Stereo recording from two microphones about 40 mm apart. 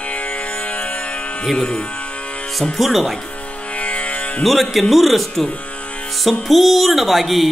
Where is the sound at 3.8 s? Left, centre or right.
Left.